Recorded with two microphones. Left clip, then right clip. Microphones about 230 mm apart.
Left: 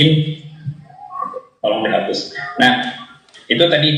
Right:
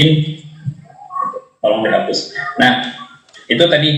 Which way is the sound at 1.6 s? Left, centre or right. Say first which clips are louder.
Right 3 dB; right.